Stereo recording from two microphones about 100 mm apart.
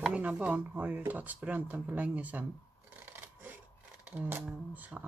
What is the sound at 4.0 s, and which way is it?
Speech, 15° right (ahead or behind).